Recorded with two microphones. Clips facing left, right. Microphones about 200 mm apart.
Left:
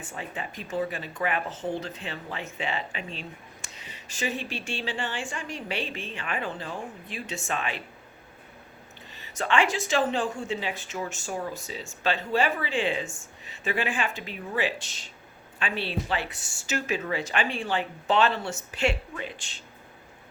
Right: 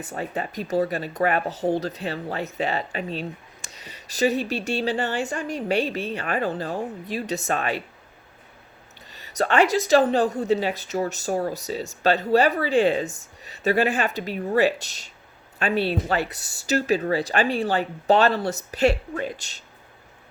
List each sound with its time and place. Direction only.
0.0 s speech: 40° right (ahead or behind)
9.0 s speech: 40° right (ahead or behind)